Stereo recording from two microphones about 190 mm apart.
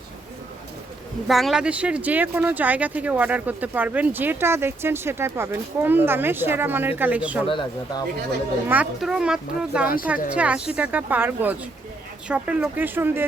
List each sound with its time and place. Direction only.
1.3 s speech: centre (ahead or behind)
7.4 s speech: 25° left (ahead or behind)
8.6 s speech: 5° right (ahead or behind)